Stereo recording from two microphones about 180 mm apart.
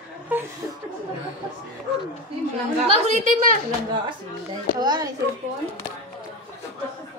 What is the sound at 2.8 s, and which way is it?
Speech, 40° right (ahead or behind).